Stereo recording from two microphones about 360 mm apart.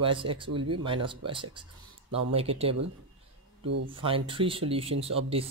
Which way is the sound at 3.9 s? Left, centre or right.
Centre.